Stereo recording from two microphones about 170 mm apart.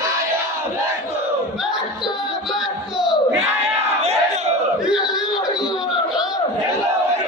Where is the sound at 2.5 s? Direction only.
Centre (ahead or behind).